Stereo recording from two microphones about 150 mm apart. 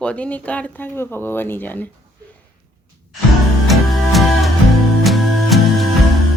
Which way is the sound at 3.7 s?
Centre (ahead or behind).